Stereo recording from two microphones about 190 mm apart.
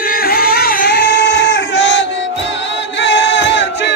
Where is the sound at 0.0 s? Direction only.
50° left (ahead or behind); by 2.0 s 80° left.